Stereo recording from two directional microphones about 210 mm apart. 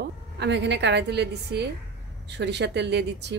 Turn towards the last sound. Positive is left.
turn(degrees=-55)  # may be behind; listen again after turning